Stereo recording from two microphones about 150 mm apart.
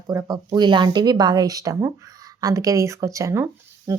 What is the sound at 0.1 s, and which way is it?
Speech, 25° right (ahead or behind).